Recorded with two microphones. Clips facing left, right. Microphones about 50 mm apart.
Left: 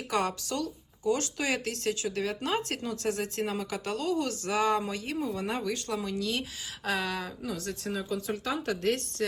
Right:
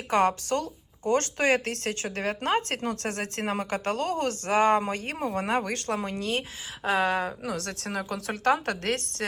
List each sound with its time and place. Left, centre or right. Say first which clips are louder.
0.1 s speech: right 7 dB; right
7.4 s a woman's voice: right 2 dB; right